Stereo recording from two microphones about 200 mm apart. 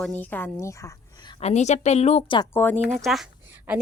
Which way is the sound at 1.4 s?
35° left (ahead or behind).